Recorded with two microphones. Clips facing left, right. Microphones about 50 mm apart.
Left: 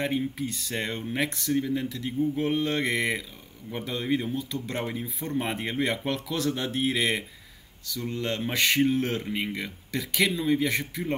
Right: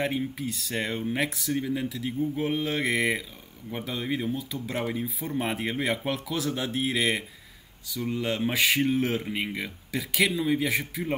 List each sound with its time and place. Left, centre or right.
0.0 s speech: centre